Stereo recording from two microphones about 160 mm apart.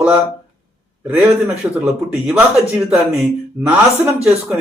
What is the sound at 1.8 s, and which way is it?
Speech, 5° right (ahead or behind).